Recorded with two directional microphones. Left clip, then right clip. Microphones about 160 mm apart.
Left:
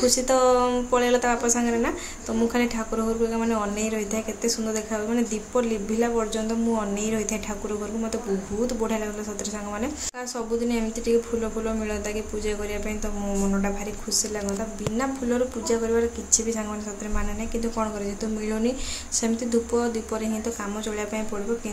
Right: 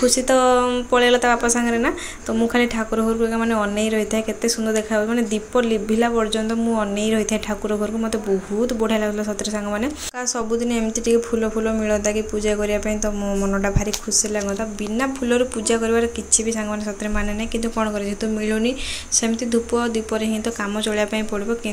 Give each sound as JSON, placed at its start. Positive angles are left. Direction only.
{"t": 0.0, "sound": "a woman's voice", "side_deg": -10}
{"t": 8.8, "sound": "a woman's voice", "side_deg": -15}
{"t": 10.6, "sound": "speech", "side_deg": -25}
{"t": 15.0, "sound": "a woman's voice", "side_deg": -15}
{"t": 19.1, "sound": "a woman's voice", "side_deg": -10}